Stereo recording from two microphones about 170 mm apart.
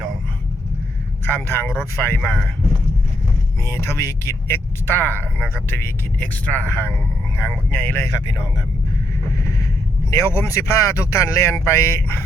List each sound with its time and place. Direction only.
1.2 s speech: 10° left (ahead or behind)
3.7 s speech: 15° left (ahead or behind)
9.4 s boat: 20° left (ahead or behind)
10.1 s speech: 15° left (ahead or behind)